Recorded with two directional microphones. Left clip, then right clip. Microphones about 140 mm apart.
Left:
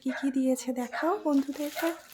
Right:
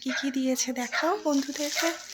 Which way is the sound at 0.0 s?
15° left (ahead or behind).